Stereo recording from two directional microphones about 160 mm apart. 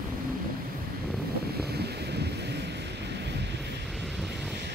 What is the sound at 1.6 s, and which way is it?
Wind noise, 90° right.